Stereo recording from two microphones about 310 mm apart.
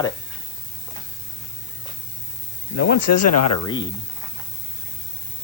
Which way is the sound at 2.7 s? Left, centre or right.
Left.